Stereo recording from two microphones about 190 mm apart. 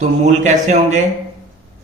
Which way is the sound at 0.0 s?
40° right (ahead or behind).